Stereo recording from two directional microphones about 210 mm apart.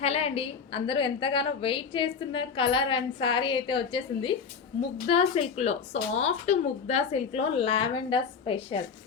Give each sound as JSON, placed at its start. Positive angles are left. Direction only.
{"t": 0.0, "sound": "a woman's voice", "side_deg": 30}